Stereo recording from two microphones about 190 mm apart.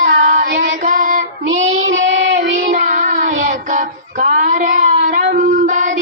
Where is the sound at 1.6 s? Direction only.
85° right.